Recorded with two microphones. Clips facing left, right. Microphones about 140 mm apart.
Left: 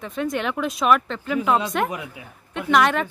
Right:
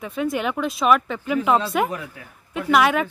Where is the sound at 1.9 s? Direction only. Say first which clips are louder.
Right 1 dB; 15° left (ahead or behind).